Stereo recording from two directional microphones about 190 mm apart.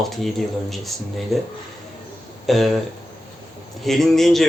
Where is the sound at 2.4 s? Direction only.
Centre (ahead or behind).